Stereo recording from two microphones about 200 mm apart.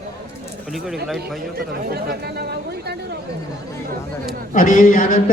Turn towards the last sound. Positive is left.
turn(degrees=40)  # may be behind; listen again after turning